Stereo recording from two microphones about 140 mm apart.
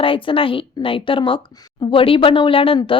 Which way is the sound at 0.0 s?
40° left (ahead or behind).